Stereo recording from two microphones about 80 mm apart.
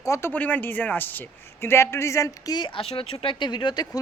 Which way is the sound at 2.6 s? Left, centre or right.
Left.